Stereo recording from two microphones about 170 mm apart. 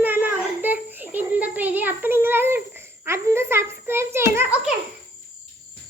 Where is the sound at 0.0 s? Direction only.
10° right (ahead or behind).